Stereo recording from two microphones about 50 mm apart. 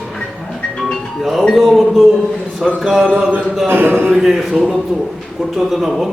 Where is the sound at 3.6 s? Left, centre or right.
Right.